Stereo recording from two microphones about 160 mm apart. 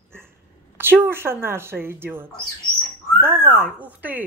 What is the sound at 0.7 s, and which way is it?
Speech, 15° right (ahead or behind).